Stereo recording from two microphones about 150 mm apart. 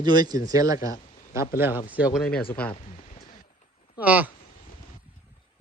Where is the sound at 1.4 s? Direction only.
15° right (ahead or behind).